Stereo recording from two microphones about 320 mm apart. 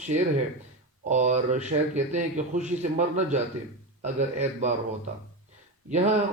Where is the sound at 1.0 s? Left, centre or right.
Right.